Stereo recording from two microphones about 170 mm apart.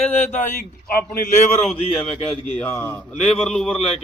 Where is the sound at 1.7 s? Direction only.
35° left (ahead or behind).